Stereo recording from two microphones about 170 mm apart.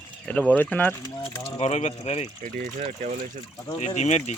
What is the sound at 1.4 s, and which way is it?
Speech, 35° left (ahead or behind).